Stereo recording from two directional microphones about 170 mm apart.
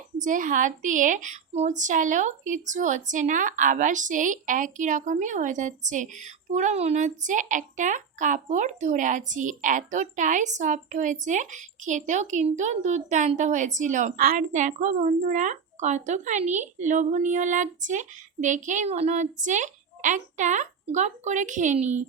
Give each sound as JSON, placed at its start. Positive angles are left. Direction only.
{"t": 0.2, "sound": "a woman's voice", "side_deg": -50}